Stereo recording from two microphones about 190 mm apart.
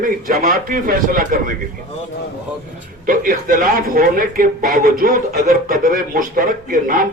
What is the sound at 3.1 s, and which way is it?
Speech, 45° right (ahead or behind).